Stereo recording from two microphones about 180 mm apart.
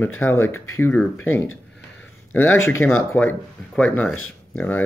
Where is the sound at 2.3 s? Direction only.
10° left (ahead or behind).